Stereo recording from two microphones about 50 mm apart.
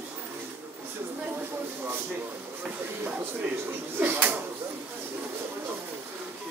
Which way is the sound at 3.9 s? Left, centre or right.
Right.